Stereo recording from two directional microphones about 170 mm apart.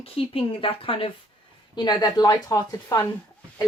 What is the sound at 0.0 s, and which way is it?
A woman's voice, 35° left (ahead or behind).